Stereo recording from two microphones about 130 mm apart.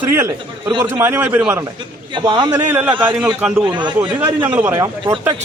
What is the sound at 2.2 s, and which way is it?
Speech, 35° right (ahead or behind).